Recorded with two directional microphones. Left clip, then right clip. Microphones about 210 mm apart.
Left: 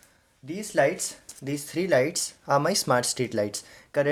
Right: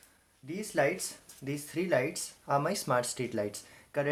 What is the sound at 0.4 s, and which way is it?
Speech, 40° left (ahead or behind).